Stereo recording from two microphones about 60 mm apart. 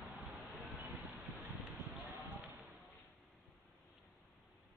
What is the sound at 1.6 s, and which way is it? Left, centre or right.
Clip-clop, right.